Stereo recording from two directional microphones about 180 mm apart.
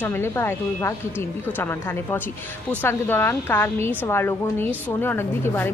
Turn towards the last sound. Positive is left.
turn(degrees=10)  # may be behind; listen again after turning